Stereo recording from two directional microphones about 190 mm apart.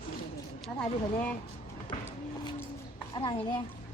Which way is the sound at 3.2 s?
25° left (ahead or behind).